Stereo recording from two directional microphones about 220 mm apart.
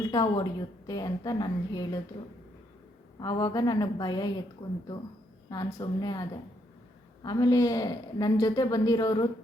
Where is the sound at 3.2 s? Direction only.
20° left (ahead or behind).